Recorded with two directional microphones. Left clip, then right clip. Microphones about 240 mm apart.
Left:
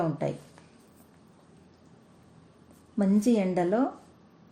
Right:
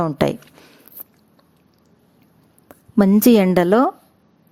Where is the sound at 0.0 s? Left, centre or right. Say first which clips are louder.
Right 10 dB; right.